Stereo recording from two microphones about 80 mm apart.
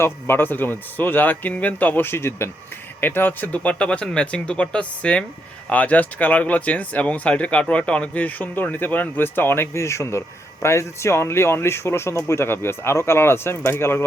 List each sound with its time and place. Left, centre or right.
0.0 s speech: left